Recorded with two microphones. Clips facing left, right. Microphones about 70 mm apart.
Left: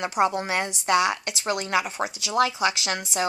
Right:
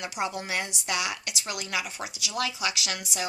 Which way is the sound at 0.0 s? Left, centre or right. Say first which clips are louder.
Left 8 dB; left.